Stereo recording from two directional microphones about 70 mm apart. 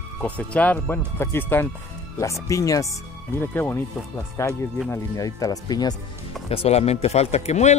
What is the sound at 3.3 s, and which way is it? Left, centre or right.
Speech, left.